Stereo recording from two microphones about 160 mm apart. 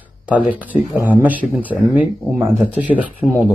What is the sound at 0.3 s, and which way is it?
Speech, 10° right (ahead or behind).